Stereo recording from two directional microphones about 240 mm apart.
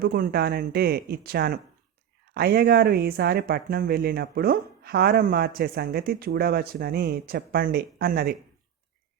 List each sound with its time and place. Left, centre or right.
0.0 s speech: right